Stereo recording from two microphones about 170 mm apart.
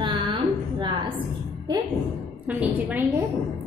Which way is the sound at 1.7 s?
25° right (ahead or behind).